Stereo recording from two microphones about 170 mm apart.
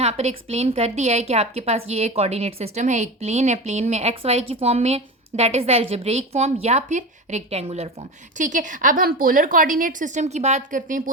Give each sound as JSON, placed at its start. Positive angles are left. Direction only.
{"t": 0.0, "sound": "a woman's voice", "side_deg": -40}
{"t": 8.4, "sound": "a woman's voice", "side_deg": -50}